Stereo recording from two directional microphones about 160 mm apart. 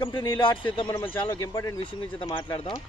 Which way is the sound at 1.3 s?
20° left (ahead or behind).